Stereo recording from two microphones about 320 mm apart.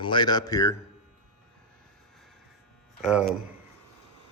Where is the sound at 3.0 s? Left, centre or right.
Centre.